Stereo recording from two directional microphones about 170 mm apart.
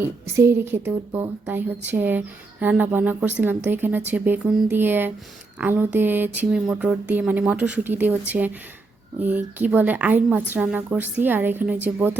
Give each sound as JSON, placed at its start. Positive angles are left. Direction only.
{"t": 0.3, "sound": "speech", "side_deg": -15}